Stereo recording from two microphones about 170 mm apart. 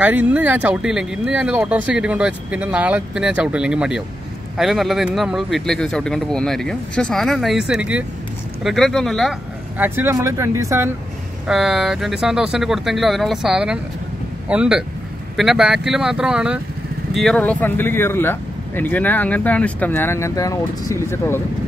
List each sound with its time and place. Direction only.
0.0 s speech: 10° right (ahead or behind)
9.8 s speech: 15° right (ahead or behind)
11.4 s speech: 5° right (ahead or behind); by 21.4 s 15° left (ahead or behind)